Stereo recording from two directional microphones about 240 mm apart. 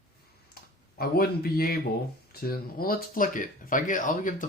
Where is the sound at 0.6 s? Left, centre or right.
Left.